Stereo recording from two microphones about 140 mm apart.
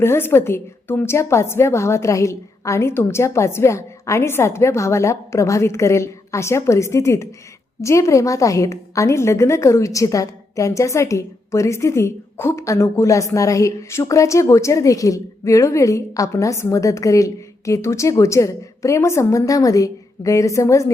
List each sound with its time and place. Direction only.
0.0 s a woman's voice: 15° left (ahead or behind)